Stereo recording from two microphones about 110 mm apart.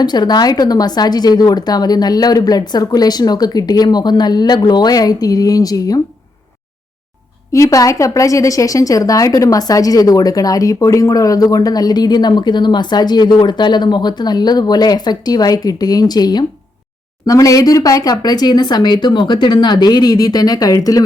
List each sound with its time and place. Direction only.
0.0 s a woman's voice: 40° left (ahead or behind)
7.5 s a woman's voice: 30° left (ahead or behind)